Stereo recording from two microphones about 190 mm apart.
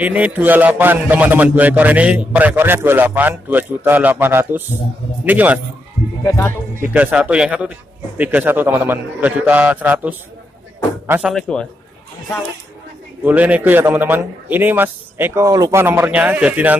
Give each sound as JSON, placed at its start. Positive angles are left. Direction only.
{"t": 0.0, "sound": "a man's voice", "side_deg": -10}
{"t": 6.2, "sound": "speech", "side_deg": 15}
{"t": 6.8, "sound": "a man's voice", "side_deg": -10}
{"t": 13.2, "sound": "a man's voice", "side_deg": -10}